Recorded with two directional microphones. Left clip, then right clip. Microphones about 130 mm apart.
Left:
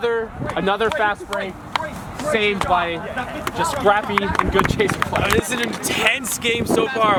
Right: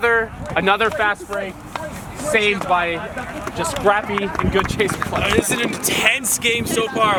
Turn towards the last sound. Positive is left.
turn(degrees=-5)  # may be behind; listen again after turning